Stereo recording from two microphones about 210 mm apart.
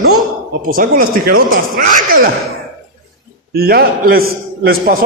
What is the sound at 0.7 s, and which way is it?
A man's voice, 45° right (ahead or behind).